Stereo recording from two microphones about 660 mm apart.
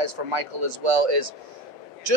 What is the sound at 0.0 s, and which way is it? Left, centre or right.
Speech, right.